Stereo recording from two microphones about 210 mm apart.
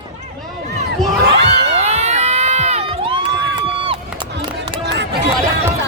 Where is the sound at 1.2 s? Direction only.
50° right (ahead or behind).